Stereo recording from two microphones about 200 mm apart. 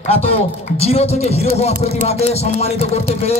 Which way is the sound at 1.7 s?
45° right (ahead or behind).